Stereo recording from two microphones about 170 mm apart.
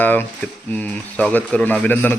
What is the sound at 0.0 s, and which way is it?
Speech, 10° left (ahead or behind).